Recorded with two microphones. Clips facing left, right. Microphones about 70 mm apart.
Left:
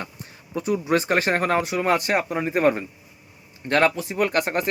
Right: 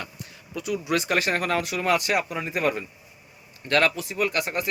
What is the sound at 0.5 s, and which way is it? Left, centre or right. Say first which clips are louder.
Speech: left 4 dB; left.